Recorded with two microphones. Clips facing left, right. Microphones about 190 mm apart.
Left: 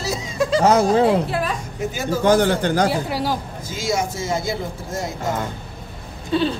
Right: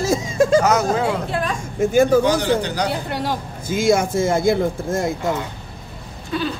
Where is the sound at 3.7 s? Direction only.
55° right (ahead or behind).